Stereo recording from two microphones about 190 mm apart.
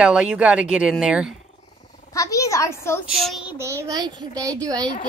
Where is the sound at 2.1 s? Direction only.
15° left (ahead or behind).